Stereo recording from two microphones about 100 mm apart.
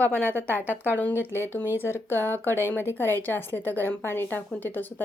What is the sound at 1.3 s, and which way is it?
A woman's voice, 20° left (ahead or behind).